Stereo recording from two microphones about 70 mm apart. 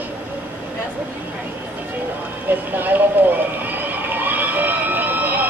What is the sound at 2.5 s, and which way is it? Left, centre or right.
Speech, right.